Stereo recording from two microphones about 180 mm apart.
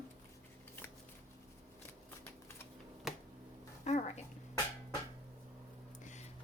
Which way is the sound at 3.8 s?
40° left (ahead or behind).